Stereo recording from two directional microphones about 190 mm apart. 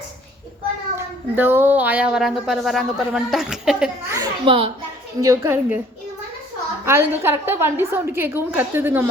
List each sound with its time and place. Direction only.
0.9 s speech: 10° right (ahead or behind)
4.1 s a child's voice: 25° right (ahead or behind)
5.2 s a woman's voice: 15° right (ahead or behind)
6.8 s a woman's voice: 15° right (ahead or behind)